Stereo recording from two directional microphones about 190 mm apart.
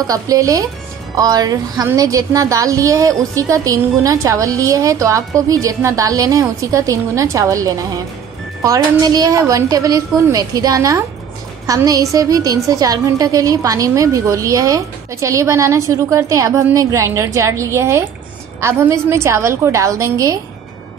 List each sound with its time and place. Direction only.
0.0 s a woman's voice: 20° right (ahead or behind)